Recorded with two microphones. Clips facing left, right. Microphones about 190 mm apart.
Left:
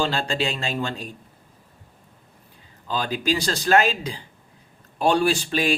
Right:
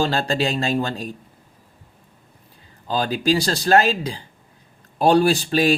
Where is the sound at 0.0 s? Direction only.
40° right (ahead or behind).